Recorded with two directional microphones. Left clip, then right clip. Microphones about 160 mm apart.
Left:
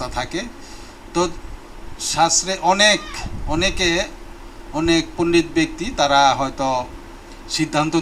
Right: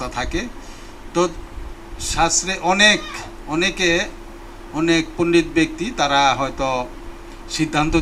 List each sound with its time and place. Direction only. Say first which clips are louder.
0.0 s speech: even; 55° left (ahead or behind)
2.0 s a man's voice: left 2 dB; 55° left (ahead or behind)